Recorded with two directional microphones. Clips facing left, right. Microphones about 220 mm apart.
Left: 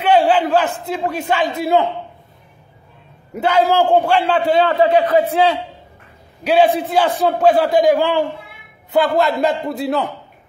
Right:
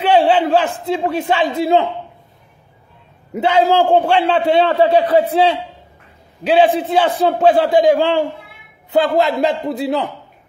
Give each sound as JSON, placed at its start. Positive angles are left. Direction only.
{"t": 0.0, "sound": "a sound", "side_deg": -30}
{"t": 0.8, "sound": "a man's voice", "side_deg": -25}
{"t": 3.3, "sound": "a man's voice", "side_deg": -25}